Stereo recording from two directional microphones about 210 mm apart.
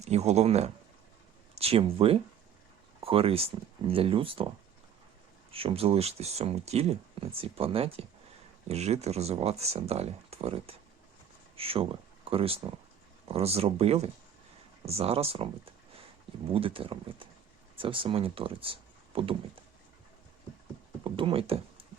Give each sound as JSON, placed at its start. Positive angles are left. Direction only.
{"t": 0.0, "sound": "speech", "side_deg": -30}
{"t": 5.5, "sound": "speech", "side_deg": -25}
{"t": 16.5, "sound": "speech", "side_deg": -25}
{"t": 21.0, "sound": "speech", "side_deg": -25}